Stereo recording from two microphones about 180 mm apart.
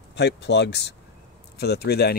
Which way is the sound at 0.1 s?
70° left (ahead or behind).